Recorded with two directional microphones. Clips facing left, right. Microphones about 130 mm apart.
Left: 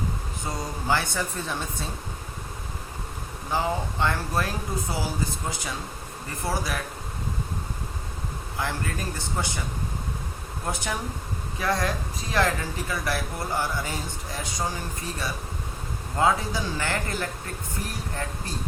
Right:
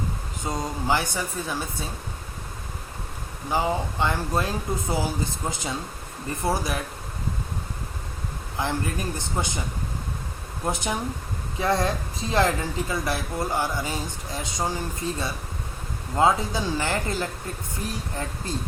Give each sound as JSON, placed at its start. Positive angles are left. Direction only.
{"t": 0.4, "sound": "speech", "side_deg": -15}
{"t": 3.5, "sound": "speech", "side_deg": -15}
{"t": 8.5, "sound": "speech", "side_deg": -20}
{"t": 10.7, "sound": "speech", "side_deg": -20}
{"t": 16.1, "sound": "speech", "side_deg": -20}